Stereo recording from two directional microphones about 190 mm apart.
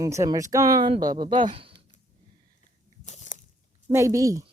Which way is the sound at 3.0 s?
40° left (ahead or behind).